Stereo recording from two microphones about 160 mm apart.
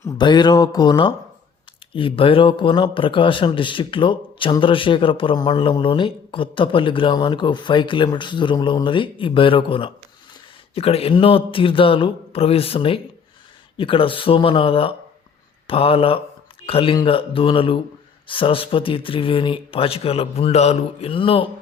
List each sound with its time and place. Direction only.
0.0 s speech: 25° left (ahead or behind)